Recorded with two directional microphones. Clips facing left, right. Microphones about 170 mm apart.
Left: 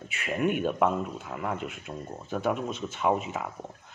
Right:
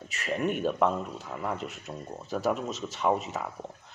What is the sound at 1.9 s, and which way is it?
Speech, centre (ahead or behind).